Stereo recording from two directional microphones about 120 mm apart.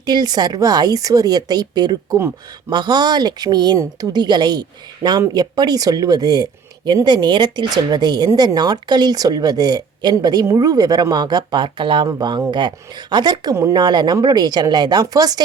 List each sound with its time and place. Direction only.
0.0 s speech: 35° right (ahead or behind)